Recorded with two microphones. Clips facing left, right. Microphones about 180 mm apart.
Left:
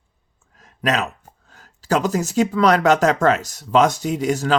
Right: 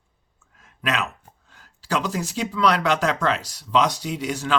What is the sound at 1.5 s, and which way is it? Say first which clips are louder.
Speech: left 6 dB; 45° left (ahead or behind).